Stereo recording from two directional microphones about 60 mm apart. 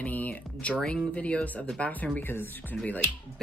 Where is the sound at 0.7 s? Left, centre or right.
Centre.